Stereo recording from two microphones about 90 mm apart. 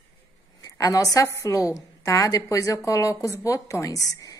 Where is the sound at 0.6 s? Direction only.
40° left (ahead or behind).